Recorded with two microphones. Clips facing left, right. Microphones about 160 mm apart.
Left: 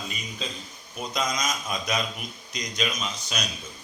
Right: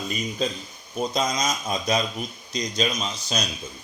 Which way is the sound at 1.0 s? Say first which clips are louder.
Right 4 dB; 30° right (ahead or behind).